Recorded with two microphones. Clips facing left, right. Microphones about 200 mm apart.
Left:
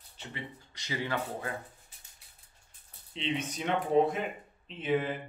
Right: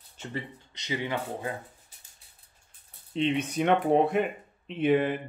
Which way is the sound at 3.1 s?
55° right (ahead or behind).